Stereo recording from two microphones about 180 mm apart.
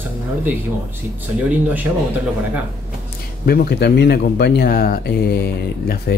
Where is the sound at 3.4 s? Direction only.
60° left (ahead or behind).